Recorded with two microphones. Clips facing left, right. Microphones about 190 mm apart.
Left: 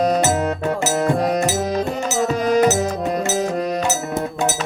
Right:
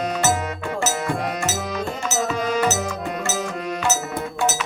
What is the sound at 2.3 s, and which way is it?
Music, 40° left (ahead or behind).